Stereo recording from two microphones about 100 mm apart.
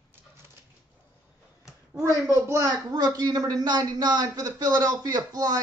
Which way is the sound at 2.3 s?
30° right (ahead or behind).